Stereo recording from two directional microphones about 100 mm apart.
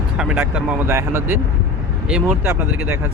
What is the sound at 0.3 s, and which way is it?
Speech, 15° right (ahead or behind).